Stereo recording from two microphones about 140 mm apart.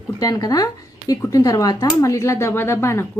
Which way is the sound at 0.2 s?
25° left (ahead or behind).